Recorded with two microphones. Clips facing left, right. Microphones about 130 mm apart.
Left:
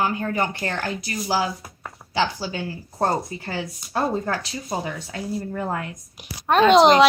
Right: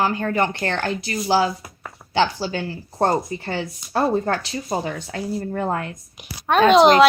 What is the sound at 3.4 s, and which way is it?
Speech, 25° right (ahead or behind).